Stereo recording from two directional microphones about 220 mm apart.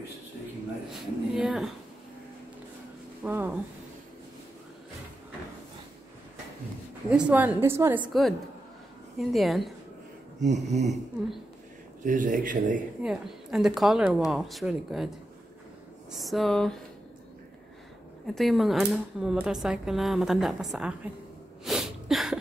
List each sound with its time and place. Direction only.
0.8 s speech: centre (ahead or behind)
3.3 s speech: 10° right (ahead or behind)
7.1 s a woman's voice: 5° right (ahead or behind)
8.1 s speech: centre (ahead or behind)
10.4 s speech: 30° right (ahead or behind)
12.0 s speech: 35° right (ahead or behind)
13.0 s speech: 5° right (ahead or behind)
18.2 s speech: centre (ahead or behind)
21.6 s sneeze: centre (ahead or behind)